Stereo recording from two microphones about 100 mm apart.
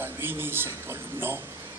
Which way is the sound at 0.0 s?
20° right (ahead or behind).